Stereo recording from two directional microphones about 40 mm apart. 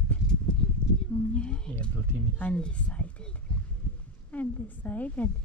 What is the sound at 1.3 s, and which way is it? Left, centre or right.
Speech, left.